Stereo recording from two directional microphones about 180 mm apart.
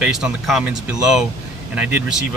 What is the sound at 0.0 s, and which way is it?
Speech, 5° right (ahead or behind).